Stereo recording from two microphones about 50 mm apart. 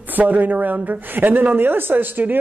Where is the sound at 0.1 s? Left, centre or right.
Right.